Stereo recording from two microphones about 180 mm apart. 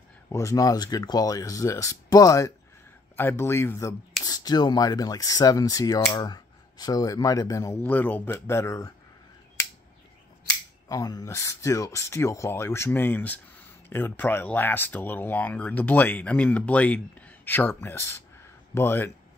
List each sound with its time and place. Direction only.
0.3 s speech: 15° left (ahead or behind)
10.9 s speech: 20° left (ahead or behind)